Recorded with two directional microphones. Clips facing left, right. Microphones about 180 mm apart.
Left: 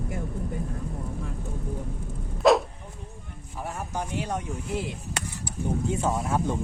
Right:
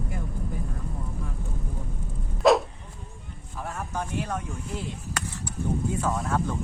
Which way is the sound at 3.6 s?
15° left (ahead or behind).